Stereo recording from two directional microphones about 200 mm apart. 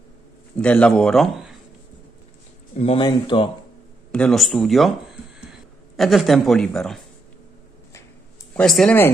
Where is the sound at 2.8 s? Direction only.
25° left (ahead or behind).